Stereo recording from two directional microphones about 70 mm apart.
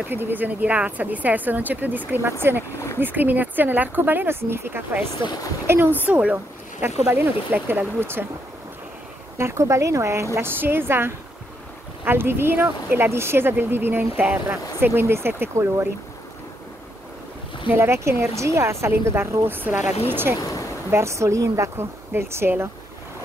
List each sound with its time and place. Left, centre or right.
0.1 s speech: right
6.0 s speech: centre
9.4 s speech: right
10.3 s speech: right
14.1 s speech: centre
14.5 s speech: right
17.7 s speech: right
20.3 s speech: left
20.9 s speech: right
22.1 s speech: right